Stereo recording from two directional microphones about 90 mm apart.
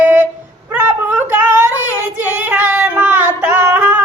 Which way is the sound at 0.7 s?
20° right (ahead or behind).